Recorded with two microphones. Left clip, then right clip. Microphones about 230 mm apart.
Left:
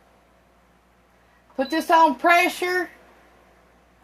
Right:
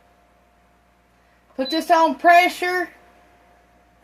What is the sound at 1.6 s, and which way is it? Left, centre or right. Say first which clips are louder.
Speech: even; centre.